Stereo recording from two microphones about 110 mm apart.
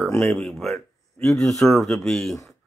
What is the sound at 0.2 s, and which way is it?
Speech, 5° left (ahead or behind).